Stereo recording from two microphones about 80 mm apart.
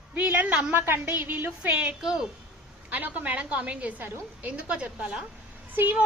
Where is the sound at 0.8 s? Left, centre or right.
Right.